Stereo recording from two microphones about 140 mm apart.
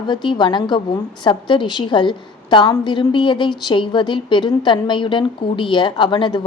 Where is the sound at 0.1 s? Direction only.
35° left (ahead or behind).